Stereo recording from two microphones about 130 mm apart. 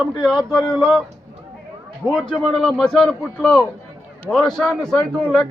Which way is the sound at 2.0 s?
5° left (ahead or behind).